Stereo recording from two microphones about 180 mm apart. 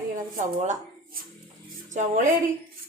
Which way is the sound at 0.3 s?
45° right (ahead or behind).